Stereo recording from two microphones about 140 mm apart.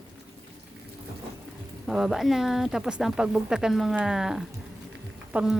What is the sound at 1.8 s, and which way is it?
A woman's voice, 5° right (ahead or behind).